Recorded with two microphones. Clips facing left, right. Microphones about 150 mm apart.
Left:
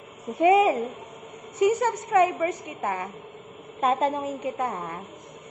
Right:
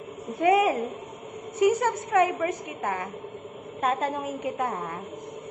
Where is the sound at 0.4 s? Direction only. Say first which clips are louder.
Left 3 dB; centre (ahead or behind).